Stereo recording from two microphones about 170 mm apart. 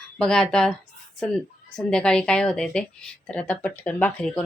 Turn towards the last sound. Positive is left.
turn(degrees=5)  # may be behind; listen again after turning